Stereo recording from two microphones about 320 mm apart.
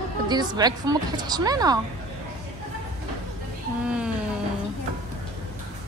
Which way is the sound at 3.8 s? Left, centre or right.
Centre.